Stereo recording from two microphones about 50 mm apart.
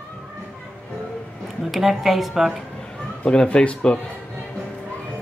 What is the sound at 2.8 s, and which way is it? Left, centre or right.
Speech, centre.